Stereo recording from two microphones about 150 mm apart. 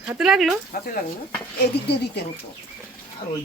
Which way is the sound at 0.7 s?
85° left.